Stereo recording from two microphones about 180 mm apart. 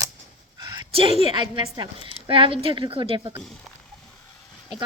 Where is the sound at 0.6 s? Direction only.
25° right (ahead or behind).